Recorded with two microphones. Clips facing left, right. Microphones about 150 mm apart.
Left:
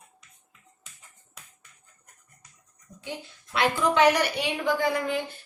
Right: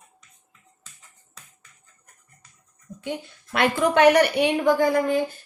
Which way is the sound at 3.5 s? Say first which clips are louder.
Right 3 dB; 55° right (ahead or behind).